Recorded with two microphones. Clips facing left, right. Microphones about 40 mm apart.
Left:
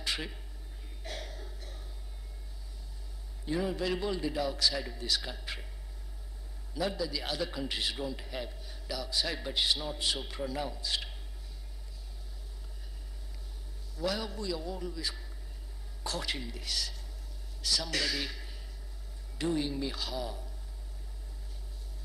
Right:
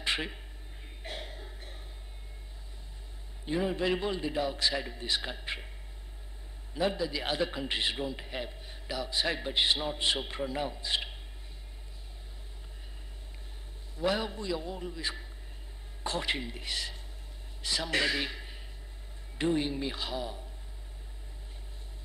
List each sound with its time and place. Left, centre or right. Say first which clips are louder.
0.0 s a sound: right 4 dB; right
3.4 s a man's voice: right 2 dB; right
6.7 s a man's voice: right 3 dB; right
13.9 s a man's voice: right 3 dB; right